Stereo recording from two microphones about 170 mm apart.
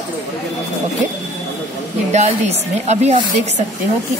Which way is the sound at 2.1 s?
40° right (ahead or behind).